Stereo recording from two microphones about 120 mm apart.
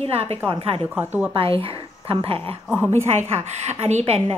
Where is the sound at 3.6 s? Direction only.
65° right (ahead or behind).